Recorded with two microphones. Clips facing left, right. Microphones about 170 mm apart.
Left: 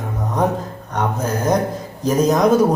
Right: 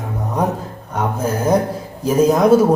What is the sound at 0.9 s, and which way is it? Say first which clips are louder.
Music: right 1 dB; 10° right (ahead or behind).